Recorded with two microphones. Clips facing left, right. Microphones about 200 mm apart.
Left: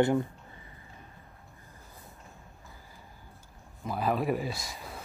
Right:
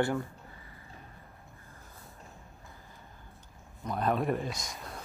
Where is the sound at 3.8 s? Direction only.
5° left (ahead or behind).